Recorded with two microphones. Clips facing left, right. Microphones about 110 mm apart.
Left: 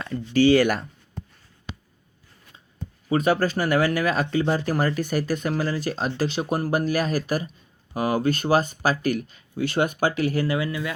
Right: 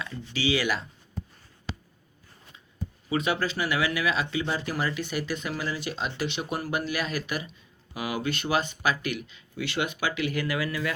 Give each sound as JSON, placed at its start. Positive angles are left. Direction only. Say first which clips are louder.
{"t": 0.0, "sound": "speech", "louder": "left 11 dB", "side_deg": 50}
{"t": 3.1, "sound": "speech", "louder": "left 6 dB", "side_deg": 45}